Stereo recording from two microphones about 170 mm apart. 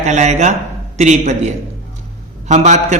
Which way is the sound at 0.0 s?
45° right (ahead or behind).